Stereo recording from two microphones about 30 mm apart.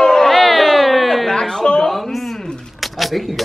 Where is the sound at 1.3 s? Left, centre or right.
Centre.